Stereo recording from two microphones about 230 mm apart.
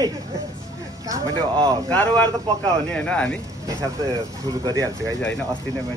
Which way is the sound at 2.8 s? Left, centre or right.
Centre.